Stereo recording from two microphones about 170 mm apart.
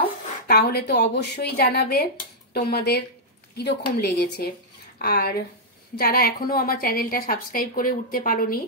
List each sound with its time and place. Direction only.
0.5 s a woman's voice: 70° left (ahead or behind)